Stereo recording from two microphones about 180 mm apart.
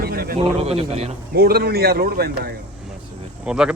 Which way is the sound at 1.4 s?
60° right (ahead or behind).